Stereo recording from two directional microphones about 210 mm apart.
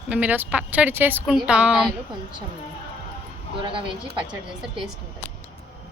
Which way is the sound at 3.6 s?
25° right (ahead or behind).